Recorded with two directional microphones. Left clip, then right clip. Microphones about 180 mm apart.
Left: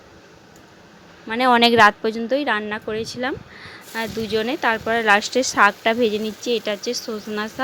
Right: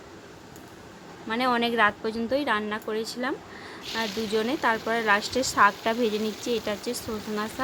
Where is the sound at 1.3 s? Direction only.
45° left (ahead or behind).